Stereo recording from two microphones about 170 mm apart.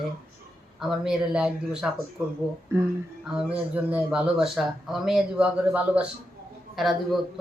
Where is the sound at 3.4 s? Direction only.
10° right (ahead or behind).